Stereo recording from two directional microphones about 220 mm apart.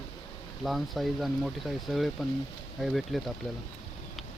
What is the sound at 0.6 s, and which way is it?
Speech, centre (ahead or behind).